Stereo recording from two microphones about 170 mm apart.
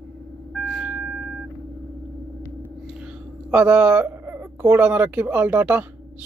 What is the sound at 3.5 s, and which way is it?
Speech, 10° right (ahead or behind).